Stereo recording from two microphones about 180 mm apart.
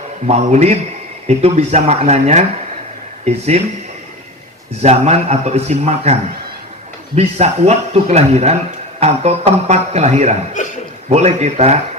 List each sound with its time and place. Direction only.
0.3 s a man's voice: 35° right (ahead or behind)
4.8 s a man's voice: 35° right (ahead or behind)
7.2 s a man's voice: 35° right (ahead or behind)
10.6 s a sound: 45° left (ahead or behind)
11.1 s a man's voice: 40° right (ahead or behind)